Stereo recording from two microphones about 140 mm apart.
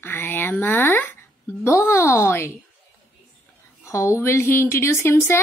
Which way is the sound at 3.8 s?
20° left (ahead or behind).